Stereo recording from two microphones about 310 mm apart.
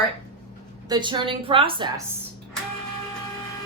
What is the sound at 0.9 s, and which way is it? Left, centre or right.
A woman's voice, centre.